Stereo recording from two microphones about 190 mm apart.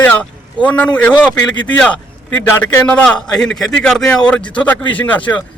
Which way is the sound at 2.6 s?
10° left (ahead or behind).